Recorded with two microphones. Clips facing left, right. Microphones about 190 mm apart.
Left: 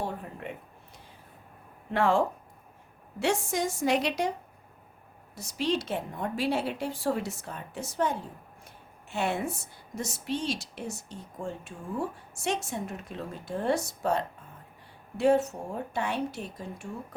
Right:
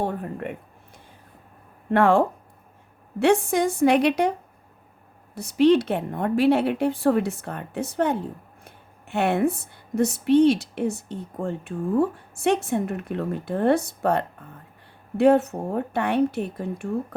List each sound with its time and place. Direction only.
0.0 s speech: 55° right (ahead or behind)
1.9 s speech: 60° right (ahead or behind)